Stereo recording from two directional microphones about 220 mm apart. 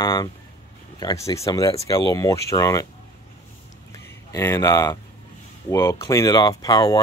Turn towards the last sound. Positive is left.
turn(degrees=20)  # may be behind; listen again after turning